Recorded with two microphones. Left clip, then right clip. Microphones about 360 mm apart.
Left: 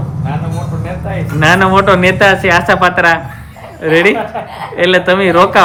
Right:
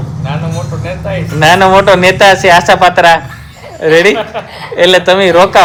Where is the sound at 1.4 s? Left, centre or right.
Centre.